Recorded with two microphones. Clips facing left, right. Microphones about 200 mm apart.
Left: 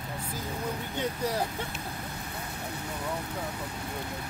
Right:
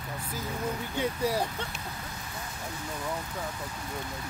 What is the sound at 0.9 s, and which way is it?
Speech, 10° right (ahead or behind).